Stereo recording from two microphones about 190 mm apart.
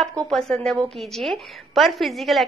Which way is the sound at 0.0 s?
Centre (ahead or behind).